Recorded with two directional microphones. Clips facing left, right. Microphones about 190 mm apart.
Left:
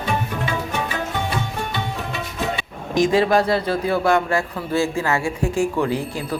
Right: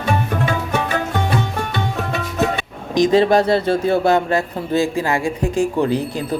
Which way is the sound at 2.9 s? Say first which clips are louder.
Right 3 dB; 20° right (ahead or behind).